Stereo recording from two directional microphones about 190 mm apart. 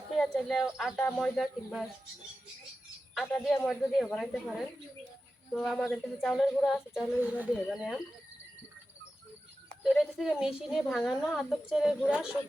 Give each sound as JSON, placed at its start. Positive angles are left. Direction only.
{"t": 0.1, "sound": "a woman's voice", "side_deg": 0}
{"t": 3.2, "sound": "a woman's voice", "side_deg": 0}
{"t": 9.8, "sound": "a woman's voice", "side_deg": 0}